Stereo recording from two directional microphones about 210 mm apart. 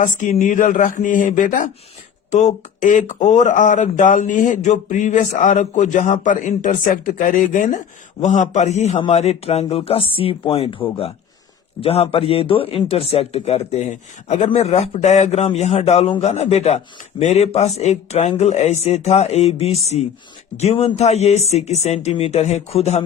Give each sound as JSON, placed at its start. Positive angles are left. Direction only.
{"t": 0.0, "sound": "a man's voice", "side_deg": 35}